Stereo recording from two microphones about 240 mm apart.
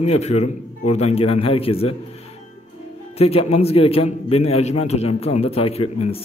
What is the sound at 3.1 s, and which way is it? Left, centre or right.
A man's voice, left.